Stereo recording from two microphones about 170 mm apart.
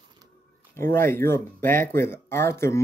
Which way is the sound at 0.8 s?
15° left (ahead or behind).